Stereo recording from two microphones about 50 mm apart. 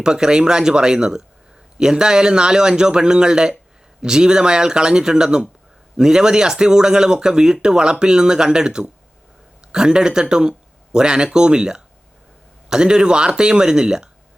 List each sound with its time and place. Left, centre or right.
0.0 s speech: centre